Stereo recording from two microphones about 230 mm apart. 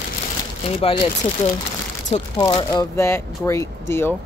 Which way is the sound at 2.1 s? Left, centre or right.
Left.